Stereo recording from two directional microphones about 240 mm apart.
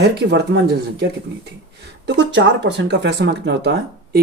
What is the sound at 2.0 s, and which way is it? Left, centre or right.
Speech, right.